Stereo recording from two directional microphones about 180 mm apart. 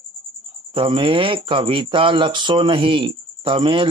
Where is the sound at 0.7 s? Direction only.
30° right (ahead or behind).